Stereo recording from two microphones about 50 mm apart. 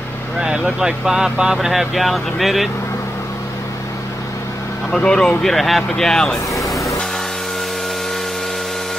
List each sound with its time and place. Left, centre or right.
0.4 s speech: centre
4.9 s speech: centre
5.4 s speech: centre
6.6 s vehicle: centre